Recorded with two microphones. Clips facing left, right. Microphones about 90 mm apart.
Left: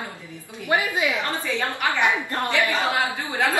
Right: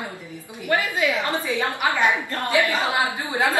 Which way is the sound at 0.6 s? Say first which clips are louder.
Even; 20° left (ahead or behind).